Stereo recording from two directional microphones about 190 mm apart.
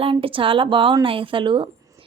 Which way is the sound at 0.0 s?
30° right (ahead or behind).